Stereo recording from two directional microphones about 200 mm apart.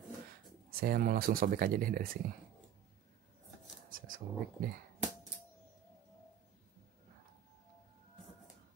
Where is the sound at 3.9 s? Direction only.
45° right (ahead or behind).